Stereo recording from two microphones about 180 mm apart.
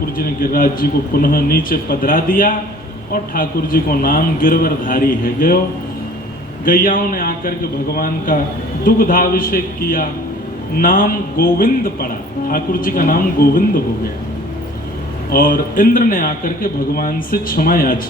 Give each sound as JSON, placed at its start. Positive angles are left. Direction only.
{"t": 0.2, "sound": "a man's voice", "side_deg": 55}
{"t": 6.7, "sound": "a man's voice", "side_deg": 50}
{"t": 15.3, "sound": "a man's voice", "side_deg": 55}